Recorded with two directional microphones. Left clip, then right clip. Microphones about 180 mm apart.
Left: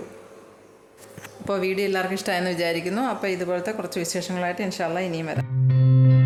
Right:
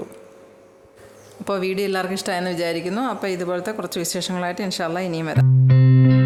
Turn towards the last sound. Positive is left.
turn(degrees=0)  # may be behind; listen again after turning